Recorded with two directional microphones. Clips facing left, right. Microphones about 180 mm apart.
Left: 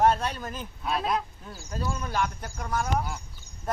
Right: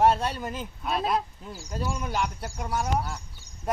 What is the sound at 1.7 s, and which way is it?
Speech, 15° right (ahead or behind).